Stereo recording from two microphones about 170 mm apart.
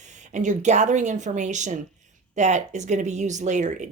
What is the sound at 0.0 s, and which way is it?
Speech, 45° right (ahead or behind).